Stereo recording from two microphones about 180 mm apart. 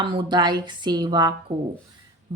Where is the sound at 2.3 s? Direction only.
25° right (ahead or behind).